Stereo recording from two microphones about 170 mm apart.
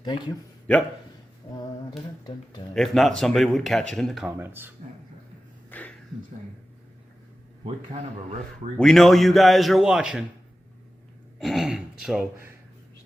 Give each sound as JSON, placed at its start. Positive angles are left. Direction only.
{"t": 0.0, "sound": "a man's voice", "side_deg": 25}
{"t": 2.7, "sound": "speech", "side_deg": 0}
{"t": 4.4, "sound": "speech", "side_deg": -10}
{"t": 5.7, "sound": "a sound", "side_deg": 10}
{"t": 8.8, "sound": "speech", "side_deg": 5}
{"t": 11.3, "sound": "speech", "side_deg": 0}